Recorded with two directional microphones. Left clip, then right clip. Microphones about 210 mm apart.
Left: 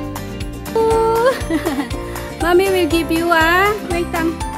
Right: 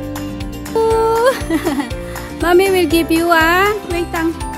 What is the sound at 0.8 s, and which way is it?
Music, 30° right (ahead or behind).